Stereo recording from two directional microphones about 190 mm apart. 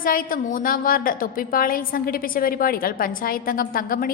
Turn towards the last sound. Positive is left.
turn(degrees=50)  # may be behind; listen again after turning